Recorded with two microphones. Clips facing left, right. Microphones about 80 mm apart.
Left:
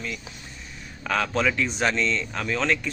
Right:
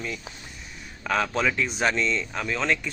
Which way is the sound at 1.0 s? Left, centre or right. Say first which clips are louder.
Even; centre.